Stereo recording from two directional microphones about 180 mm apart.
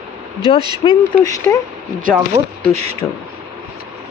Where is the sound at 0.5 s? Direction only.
25° left (ahead or behind).